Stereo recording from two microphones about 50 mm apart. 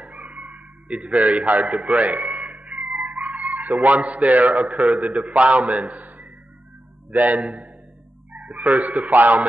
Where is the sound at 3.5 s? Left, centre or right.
Right.